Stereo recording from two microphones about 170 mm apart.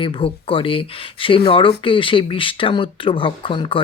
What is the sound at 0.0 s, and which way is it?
Speech, 30° left (ahead or behind).